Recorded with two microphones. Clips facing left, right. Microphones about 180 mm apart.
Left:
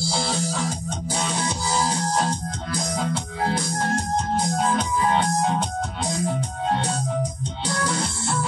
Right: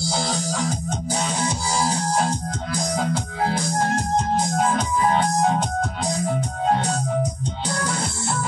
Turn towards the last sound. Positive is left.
turn(degrees=-40)  # may be behind; listen again after turning